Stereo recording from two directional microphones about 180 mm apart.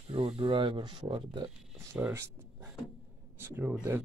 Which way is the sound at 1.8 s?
10° right (ahead or behind).